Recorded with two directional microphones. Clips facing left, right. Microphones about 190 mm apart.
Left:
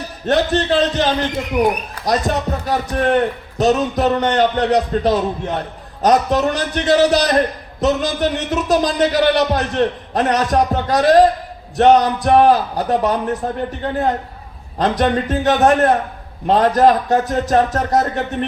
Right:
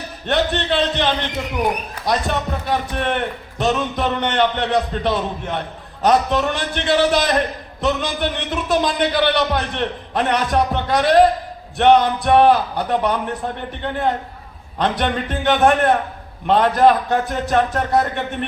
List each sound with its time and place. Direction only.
0.3 s a man's voice: 40° left (ahead or behind)
14.8 s a man's voice: 40° left (ahead or behind)